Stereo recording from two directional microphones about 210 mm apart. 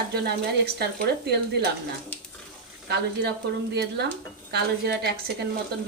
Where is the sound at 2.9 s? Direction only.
50° right (ahead or behind).